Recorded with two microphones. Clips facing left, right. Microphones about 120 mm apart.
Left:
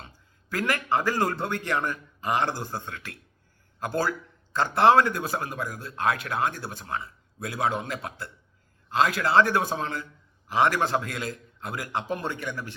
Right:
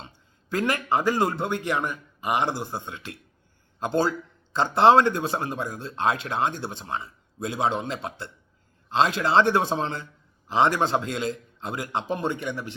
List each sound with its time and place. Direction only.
0.5 s a man's voice: 20° right (ahead or behind)